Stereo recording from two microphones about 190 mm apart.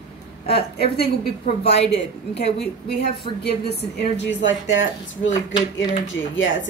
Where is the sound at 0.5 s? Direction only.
30° left (ahead or behind).